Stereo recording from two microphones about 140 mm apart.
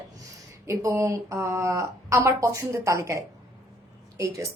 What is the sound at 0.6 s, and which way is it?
Speech, 20° right (ahead or behind).